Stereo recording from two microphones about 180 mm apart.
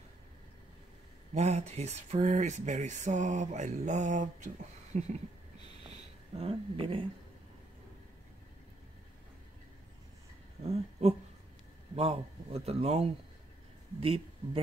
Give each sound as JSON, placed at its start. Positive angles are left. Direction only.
{"t": 1.3, "sound": "speech", "side_deg": -40}
{"t": 4.9, "sound": "a sound", "side_deg": -40}
{"t": 10.6, "sound": "speech", "side_deg": -35}